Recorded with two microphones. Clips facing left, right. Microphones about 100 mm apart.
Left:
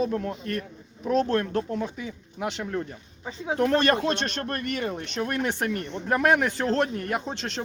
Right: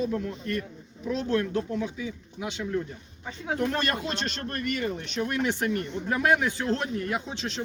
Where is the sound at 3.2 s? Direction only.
20° left (ahead or behind).